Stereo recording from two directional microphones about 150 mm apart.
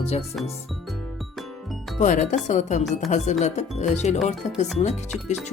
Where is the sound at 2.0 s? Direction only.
55° left (ahead or behind).